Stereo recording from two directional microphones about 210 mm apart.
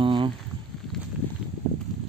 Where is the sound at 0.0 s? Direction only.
25° right (ahead or behind).